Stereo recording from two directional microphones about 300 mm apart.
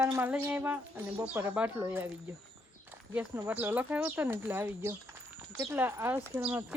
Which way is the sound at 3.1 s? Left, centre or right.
Centre.